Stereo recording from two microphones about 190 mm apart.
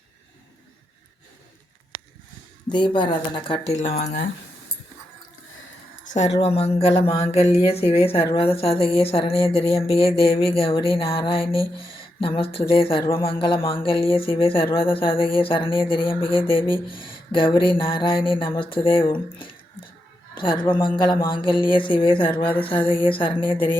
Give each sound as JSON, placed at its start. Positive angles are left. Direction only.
{"t": 2.6, "sound": "a woman's voice", "side_deg": 25}
{"t": 3.8, "sound": "speech", "side_deg": 35}
{"t": 6.4, "sound": "a woman's voice", "side_deg": 30}